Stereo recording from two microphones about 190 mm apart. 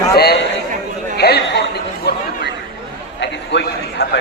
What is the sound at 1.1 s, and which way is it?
Chatter, 60° left (ahead or behind).